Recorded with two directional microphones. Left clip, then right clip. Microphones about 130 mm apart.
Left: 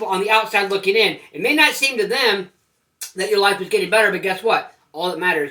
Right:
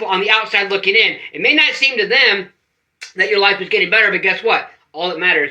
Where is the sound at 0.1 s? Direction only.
55° left (ahead or behind).